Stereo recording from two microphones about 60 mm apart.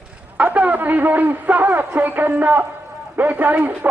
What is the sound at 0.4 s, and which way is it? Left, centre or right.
A man's voice, right.